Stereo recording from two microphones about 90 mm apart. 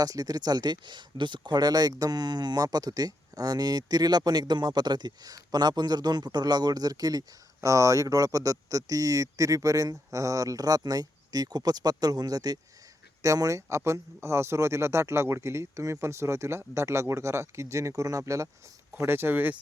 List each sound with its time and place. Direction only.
0.0 s speech: 45° right (ahead or behind)
18.9 s speech: 25° right (ahead or behind)